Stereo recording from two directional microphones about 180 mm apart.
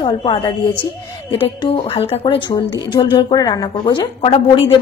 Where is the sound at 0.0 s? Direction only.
25° left (ahead or behind).